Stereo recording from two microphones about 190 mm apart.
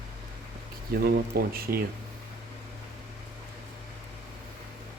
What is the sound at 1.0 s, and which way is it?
Speech, 55° right (ahead or behind).